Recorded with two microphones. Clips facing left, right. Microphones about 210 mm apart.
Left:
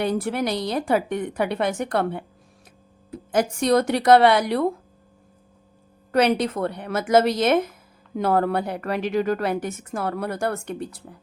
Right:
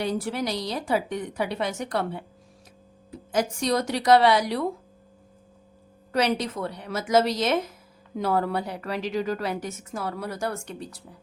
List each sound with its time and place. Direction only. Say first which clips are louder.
0.0 s a woman's voice: left 4 dB; 55° left (ahead or behind)
6.1 s a woman's voice: left 5 dB; 55° left (ahead or behind)